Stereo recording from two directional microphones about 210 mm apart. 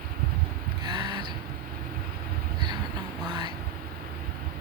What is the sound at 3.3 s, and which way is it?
Vehicle, 20° right (ahead or behind).